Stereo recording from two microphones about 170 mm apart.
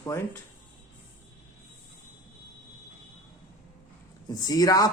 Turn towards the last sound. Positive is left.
turn(degrees=20)  # may be behind; listen again after turning